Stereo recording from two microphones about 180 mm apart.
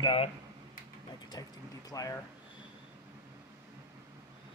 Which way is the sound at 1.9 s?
20° left (ahead or behind).